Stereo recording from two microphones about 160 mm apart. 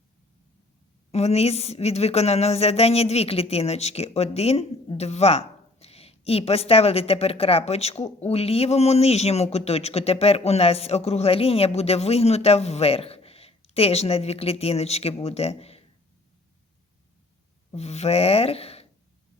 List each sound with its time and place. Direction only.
1.1 s a woman's voice: 40° left (ahead or behind)
17.7 s speech: 40° left (ahead or behind)